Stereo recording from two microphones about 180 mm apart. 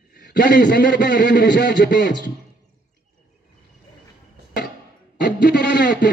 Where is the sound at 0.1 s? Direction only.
55° left (ahead or behind).